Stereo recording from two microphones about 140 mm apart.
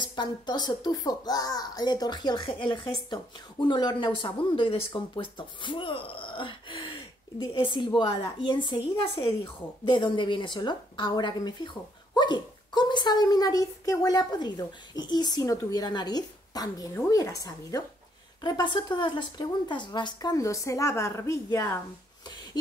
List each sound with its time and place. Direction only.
0.0 s a child's voice: 30° left (ahead or behind)